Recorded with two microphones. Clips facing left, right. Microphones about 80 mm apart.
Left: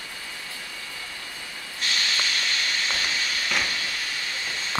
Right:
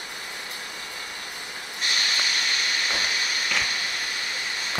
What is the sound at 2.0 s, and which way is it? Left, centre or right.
Train, centre.